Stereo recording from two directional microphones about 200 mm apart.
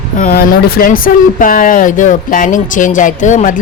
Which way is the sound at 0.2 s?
45° left (ahead or behind).